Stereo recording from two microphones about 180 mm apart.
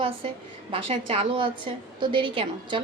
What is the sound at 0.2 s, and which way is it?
A woman's voice, 30° right (ahead or behind).